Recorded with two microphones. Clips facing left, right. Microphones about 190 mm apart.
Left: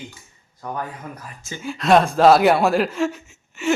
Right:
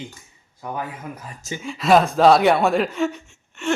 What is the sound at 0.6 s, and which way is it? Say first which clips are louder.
Speech: even; 10° right (ahead or behind).